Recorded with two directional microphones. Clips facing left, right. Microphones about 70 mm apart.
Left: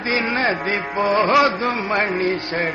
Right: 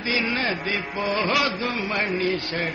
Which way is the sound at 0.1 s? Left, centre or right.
Left.